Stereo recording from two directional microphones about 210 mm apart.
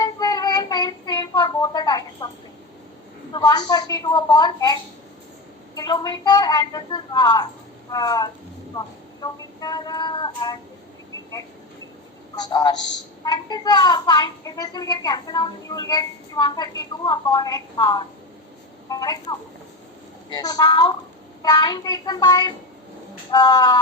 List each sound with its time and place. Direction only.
0.0 s child singing: 20° left (ahead or behind)
3.3 s a woman's voice: 20° left (ahead or behind)
12.5 s a woman's voice: 20° left (ahead or behind)